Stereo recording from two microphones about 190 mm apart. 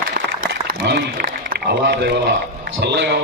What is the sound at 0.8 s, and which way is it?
A man's voice, 60° right (ahead or behind).